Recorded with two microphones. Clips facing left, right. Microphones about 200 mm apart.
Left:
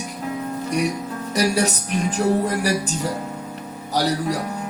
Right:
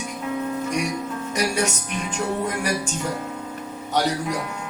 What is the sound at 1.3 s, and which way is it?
Speech, 35° left (ahead or behind).